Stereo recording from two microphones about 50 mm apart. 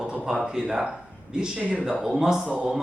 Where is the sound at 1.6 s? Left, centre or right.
Right.